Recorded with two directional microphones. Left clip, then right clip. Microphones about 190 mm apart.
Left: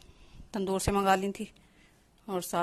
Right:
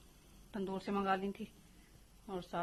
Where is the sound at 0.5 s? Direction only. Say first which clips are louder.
Left 10 dB; 40° left (ahead or behind).